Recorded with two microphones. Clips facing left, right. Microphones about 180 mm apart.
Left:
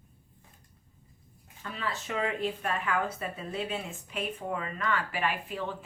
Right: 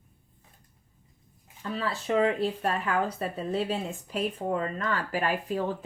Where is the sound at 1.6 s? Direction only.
35° right (ahead or behind).